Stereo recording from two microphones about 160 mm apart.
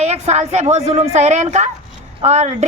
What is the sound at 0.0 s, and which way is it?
A child's voice, 45° right (ahead or behind).